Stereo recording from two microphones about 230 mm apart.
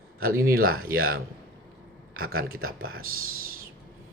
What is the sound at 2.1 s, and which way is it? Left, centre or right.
Speech, right.